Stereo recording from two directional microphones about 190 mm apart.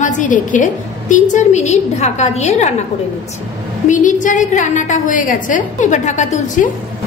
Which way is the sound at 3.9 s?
40° left (ahead or behind).